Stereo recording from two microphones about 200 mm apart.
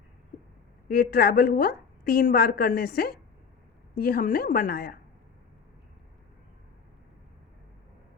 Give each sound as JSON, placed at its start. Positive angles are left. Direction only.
{"t": 0.9, "sound": "a woman's voice", "side_deg": 50}